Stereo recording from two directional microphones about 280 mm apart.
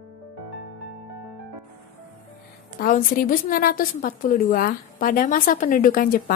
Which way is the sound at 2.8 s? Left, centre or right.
Left.